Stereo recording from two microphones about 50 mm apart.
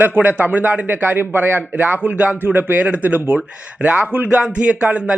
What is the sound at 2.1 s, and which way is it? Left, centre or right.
Speech, right.